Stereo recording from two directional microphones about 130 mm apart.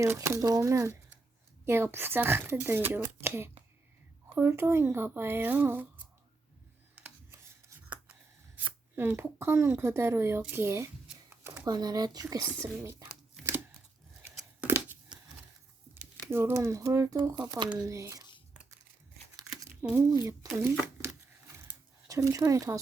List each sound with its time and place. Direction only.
0.0 s speech: 20° right (ahead or behind)
6.9 s scissors: 15° right (ahead or behind)
8.5 s speech: 15° right (ahead or behind)
11.6 s speech: 30° right (ahead or behind)
14.6 s tearing: 15° right (ahead or behind)
16.3 s speech: 20° right (ahead or behind)
19.8 s speech: 15° right (ahead or behind)